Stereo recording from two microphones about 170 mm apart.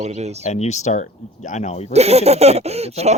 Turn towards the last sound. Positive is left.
turn(degrees=-40)  # may be behind; listen again after turning